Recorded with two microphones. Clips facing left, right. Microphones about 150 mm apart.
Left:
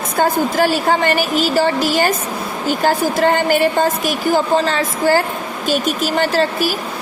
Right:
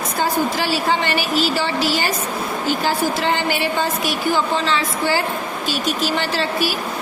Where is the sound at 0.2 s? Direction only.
50° left (ahead or behind).